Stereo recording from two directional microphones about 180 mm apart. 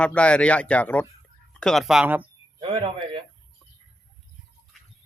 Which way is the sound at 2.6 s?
30° right (ahead or behind).